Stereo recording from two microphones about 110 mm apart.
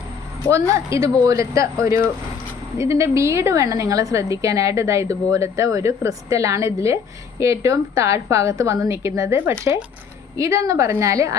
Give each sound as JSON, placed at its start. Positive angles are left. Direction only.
{"t": 0.7, "sound": "a woman's voice", "side_deg": -25}